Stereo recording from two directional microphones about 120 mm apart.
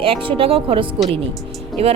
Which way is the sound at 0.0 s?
50° right (ahead or behind).